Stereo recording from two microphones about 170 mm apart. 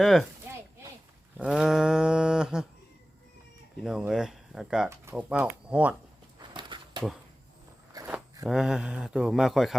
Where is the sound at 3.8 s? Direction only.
5° right (ahead or behind).